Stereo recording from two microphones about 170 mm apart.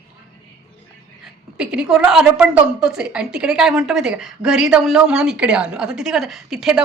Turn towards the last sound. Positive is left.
turn(degrees=0)  # may be behind; listen again after turning